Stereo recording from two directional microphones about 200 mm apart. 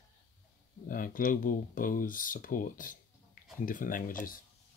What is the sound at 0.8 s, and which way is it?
Speech, 45° left (ahead or behind).